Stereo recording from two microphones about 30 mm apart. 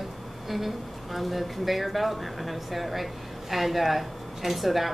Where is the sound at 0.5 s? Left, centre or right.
Centre.